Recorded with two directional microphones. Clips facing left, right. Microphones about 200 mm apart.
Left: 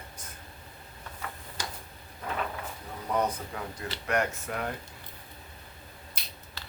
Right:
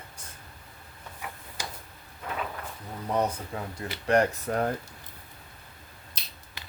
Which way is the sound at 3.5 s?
25° right (ahead or behind).